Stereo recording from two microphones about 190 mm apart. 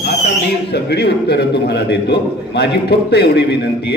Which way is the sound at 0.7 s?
60° left (ahead or behind).